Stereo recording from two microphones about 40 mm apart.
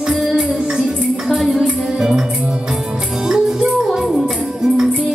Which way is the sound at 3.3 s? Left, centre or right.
Centre.